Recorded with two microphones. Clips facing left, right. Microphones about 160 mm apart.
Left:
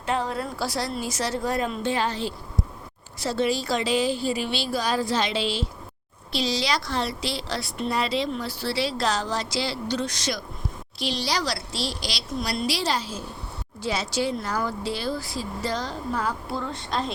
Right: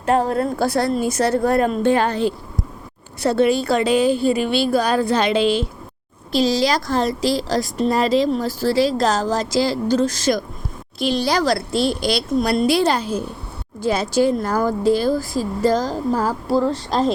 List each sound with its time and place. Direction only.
0.0 s a woman's voice: 45° right (ahead or behind)